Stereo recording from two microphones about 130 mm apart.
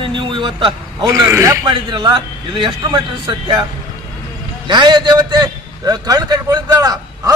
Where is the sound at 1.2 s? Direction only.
20° right (ahead or behind).